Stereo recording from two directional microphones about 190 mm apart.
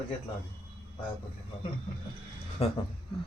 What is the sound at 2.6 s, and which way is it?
Speech, 30° left (ahead or behind).